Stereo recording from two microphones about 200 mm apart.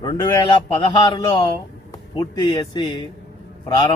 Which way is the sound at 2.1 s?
20° left (ahead or behind).